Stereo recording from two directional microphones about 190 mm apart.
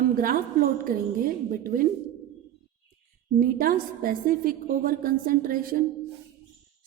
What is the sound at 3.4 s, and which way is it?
A woman's voice, 50° right (ahead or behind).